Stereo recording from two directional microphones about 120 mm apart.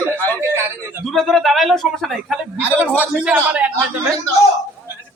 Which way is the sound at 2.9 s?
10° right (ahead or behind).